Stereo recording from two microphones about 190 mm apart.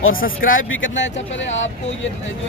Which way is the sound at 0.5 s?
90° left.